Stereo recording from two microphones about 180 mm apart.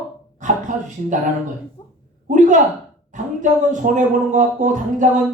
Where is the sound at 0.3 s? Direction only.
45° right (ahead or behind).